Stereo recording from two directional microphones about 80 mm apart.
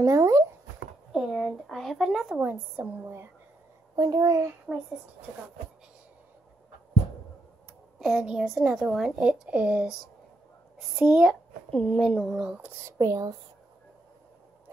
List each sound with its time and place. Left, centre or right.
0.0 s speech: right
1.1 s a woman's voice: centre
3.9 s a child's voice: right
4.7 s speech: centre
8.0 s speech: centre
11.0 s speech: centre
11.7 s speech: centre
12.3 s speech: centre
12.8 s speech: right